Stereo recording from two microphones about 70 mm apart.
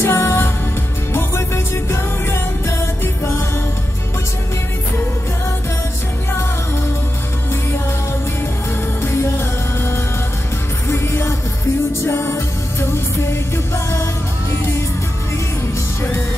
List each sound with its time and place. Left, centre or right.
0.0 s music: left
9.0 s music: left
10.9 s music: left